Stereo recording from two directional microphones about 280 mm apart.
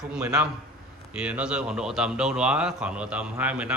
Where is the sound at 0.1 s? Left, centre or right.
Centre.